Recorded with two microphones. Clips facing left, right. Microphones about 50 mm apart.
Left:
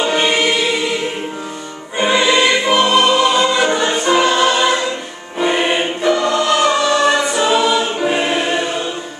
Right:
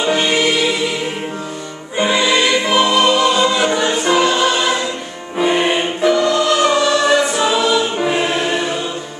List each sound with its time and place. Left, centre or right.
0.0 s choir: centre
2.0 s music: centre
5.4 s choir: centre